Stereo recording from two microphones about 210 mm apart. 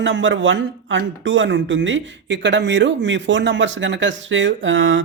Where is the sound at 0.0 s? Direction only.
65° right (ahead or behind).